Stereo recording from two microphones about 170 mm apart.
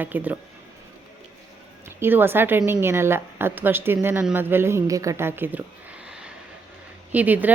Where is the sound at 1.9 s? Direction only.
15° right (ahead or behind).